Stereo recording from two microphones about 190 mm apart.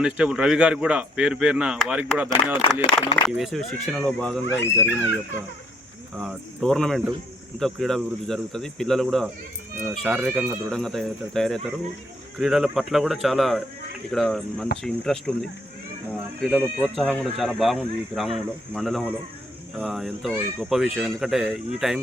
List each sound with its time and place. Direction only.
0.0 s speech: 5° right (ahead or behind)
4.4 s speech: 75° left (ahead or behind)
6.1 s speech: centre (ahead or behind)